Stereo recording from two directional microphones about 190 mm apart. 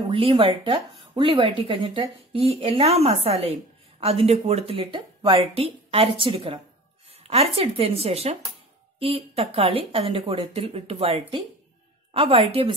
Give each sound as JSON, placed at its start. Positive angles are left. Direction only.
{"t": 0.1, "sound": "speech", "side_deg": -30}